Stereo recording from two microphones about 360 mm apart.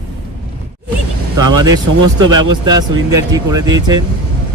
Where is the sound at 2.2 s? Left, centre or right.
Right.